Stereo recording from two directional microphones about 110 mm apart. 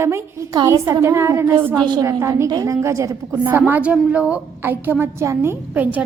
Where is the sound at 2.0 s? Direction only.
25° right (ahead or behind).